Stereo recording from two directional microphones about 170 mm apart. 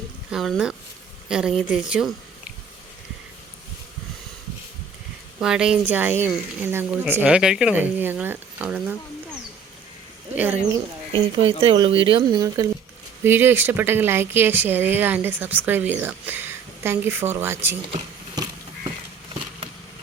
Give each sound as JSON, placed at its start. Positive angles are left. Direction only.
{"t": 0.3, "sound": "a woman's voice", "side_deg": 0}
{"t": 5.4, "sound": "speech", "side_deg": -5}
{"t": 10.3, "sound": "speech", "side_deg": -10}
{"t": 11.6, "sound": "speech", "side_deg": -30}